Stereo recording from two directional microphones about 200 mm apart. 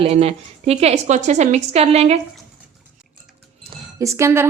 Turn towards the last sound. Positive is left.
turn(degrees=-15)  # may be behind; listen again after turning